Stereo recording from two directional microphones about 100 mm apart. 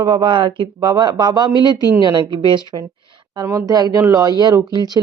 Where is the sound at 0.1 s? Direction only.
55° right (ahead or behind).